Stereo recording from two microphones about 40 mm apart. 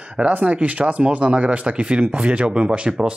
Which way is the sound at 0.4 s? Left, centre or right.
Right.